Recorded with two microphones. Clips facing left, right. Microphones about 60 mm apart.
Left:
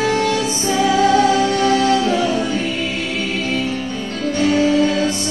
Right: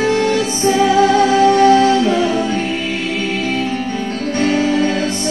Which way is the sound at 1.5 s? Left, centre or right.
Right.